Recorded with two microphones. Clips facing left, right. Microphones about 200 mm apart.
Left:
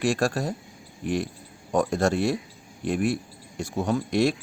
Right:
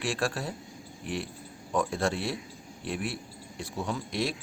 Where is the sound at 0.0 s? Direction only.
45° left (ahead or behind).